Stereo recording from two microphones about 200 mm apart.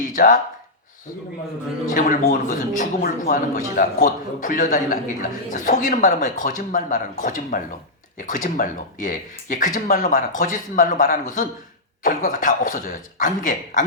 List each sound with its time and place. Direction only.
0.1 s speech: 40° left (ahead or behind)
1.9 s a man's voice: 40° left (ahead or behind)